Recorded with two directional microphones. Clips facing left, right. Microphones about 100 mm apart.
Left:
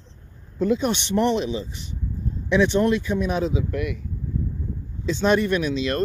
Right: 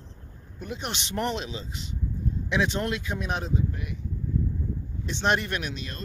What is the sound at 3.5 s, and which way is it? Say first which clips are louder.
Speech: left 5 dB; 90° left.